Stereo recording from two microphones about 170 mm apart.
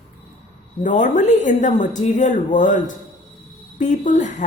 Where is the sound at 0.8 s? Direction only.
50° left (ahead or behind).